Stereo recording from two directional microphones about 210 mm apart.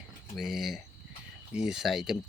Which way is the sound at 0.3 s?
Centre (ahead or behind).